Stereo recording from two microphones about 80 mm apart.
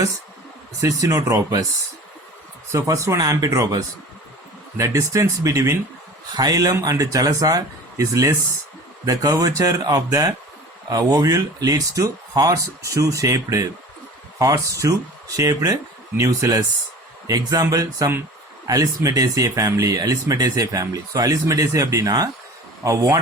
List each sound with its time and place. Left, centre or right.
0.8 s speech: right
2.7 s speech: right